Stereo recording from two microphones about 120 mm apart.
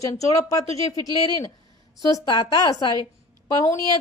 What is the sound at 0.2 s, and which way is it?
Speech, 30° left (ahead or behind).